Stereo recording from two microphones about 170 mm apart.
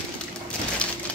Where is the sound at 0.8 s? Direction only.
5° left (ahead or behind).